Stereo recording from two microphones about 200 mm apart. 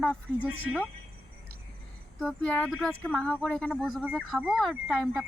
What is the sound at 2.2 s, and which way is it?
Speech, 5° left (ahead or behind).